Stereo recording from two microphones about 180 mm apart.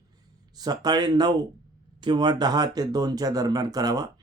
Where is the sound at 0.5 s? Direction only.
20° right (ahead or behind).